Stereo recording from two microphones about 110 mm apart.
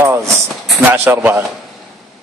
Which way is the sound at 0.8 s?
15° right (ahead or behind).